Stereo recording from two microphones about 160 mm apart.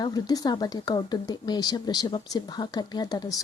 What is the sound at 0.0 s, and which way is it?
Speech, 25° left (ahead or behind).